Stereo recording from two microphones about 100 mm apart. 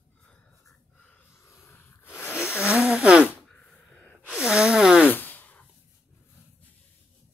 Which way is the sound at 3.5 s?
15° left (ahead or behind).